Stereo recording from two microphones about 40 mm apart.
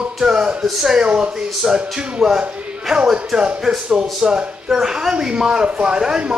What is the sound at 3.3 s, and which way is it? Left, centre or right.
Speech, centre.